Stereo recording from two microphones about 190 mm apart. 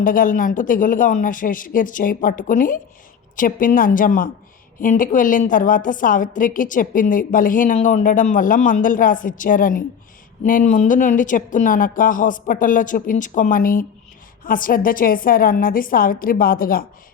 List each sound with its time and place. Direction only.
0.0 s a woman's voice: 45° left (ahead or behind)